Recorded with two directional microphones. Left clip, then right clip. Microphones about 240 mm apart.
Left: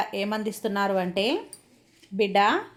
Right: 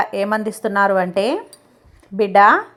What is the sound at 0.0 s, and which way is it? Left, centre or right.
A woman's voice, centre.